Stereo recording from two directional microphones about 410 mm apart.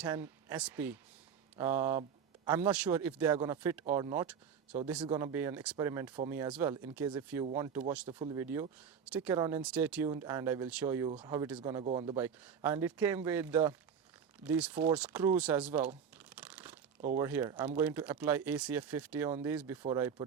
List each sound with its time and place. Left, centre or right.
0.0 s speech: centre
16.1 s crumpling: centre
17.0 s speech: centre
17.2 s speech: centre